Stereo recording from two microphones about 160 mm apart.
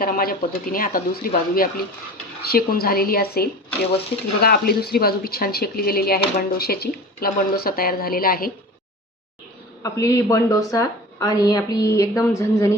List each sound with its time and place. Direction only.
0.0 s a woman's voice: 65° left (ahead or behind)
9.8 s speech: 20° left (ahead or behind)